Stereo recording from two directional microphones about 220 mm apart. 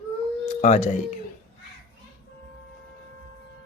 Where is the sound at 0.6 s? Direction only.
30° left (ahead or behind).